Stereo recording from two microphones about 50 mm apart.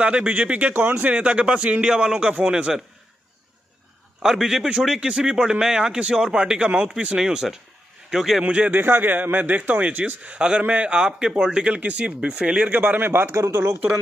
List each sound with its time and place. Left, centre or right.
0.0 s a man's voice: right
1.1 s a man's voice: right
4.2 s speech: centre
8.5 s a man's voice: right
8.7 s a man's voice: right
12.6 s a man's voice: right
13.3 s speech: right